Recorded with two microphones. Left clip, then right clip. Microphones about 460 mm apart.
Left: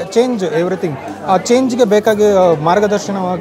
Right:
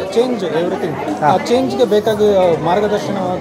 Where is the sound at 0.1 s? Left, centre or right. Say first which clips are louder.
Left 2 dB; left.